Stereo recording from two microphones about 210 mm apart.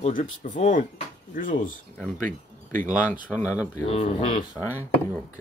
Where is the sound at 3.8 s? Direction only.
30° left (ahead or behind).